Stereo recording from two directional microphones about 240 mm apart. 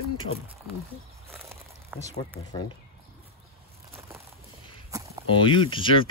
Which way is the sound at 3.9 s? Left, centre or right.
Centre.